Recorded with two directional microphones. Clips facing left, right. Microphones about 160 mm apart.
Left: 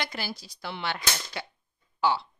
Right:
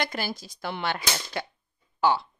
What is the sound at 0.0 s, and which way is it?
A woman's voice, 50° right (ahead or behind).